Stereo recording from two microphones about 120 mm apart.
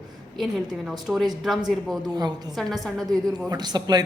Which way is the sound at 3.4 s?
35° right (ahead or behind).